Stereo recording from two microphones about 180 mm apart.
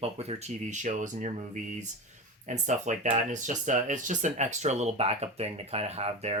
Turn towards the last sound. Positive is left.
turn(degrees=-35)  # may be behind; listen again after turning